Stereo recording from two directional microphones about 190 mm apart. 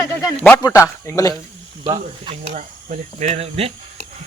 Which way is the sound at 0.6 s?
15° left (ahead or behind).